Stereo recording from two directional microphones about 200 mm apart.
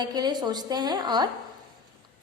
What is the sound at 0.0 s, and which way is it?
A woman's voice, 20° right (ahead or behind).